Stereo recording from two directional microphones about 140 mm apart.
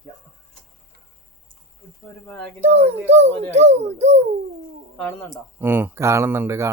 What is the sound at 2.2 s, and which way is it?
Speech, 10° left (ahead or behind).